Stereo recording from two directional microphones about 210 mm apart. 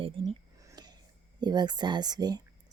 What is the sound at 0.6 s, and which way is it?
Whispering, 20° right (ahead or behind).